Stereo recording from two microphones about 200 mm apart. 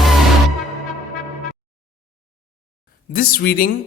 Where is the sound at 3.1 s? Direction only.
45° left (ahead or behind).